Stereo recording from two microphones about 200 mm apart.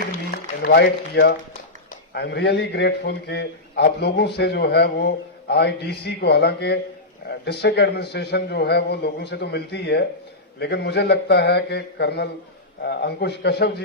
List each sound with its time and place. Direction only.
0.3 s a man's voice: 55° left (ahead or behind)